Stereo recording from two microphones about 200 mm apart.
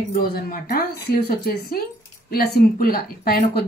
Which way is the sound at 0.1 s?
45° left (ahead or behind).